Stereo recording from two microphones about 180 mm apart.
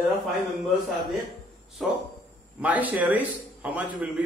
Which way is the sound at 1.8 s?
Centre (ahead or behind).